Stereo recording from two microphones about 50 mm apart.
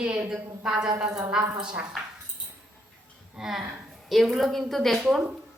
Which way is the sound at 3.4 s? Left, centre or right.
Centre.